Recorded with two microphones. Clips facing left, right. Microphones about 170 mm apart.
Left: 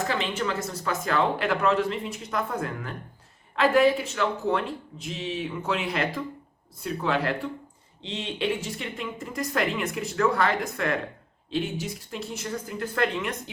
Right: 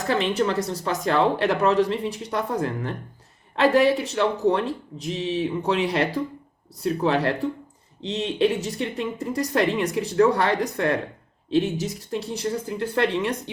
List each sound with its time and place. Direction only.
0.0 s speech: 35° right (ahead or behind)